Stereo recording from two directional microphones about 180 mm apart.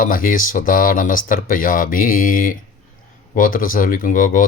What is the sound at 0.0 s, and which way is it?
Speech, 50° left (ahead or behind).